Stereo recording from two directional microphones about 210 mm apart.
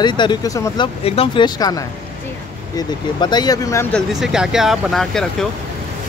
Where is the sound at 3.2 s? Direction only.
20° left (ahead or behind).